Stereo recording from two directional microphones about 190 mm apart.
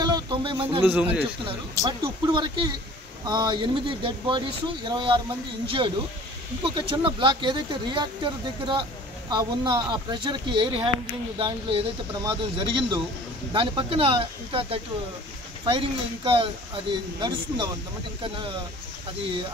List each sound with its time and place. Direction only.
0.0 s a sound: 25° right (ahead or behind)
0.8 s speech: 5° right (ahead or behind)
1.8 s speech: 20° right (ahead or behind)
6.6 s speech: 25° right (ahead or behind)